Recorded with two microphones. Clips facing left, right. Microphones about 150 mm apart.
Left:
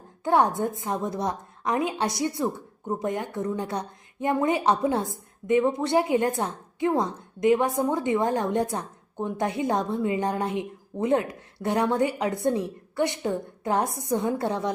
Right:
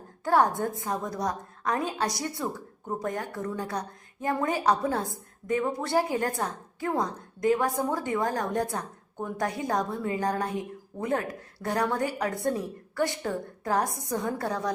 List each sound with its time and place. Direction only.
0.3 s a woman's voice: 20° left (ahead or behind)